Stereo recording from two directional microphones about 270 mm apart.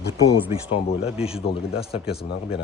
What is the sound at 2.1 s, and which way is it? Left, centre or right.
Speech, left.